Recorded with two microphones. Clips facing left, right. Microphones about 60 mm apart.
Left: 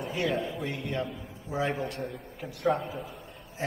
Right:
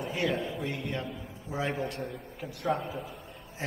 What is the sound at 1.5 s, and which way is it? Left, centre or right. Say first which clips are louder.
A man's voice: left 2 dB; left.